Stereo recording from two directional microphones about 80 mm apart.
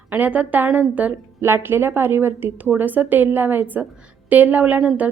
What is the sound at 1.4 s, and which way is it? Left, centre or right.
A woman's voice, right.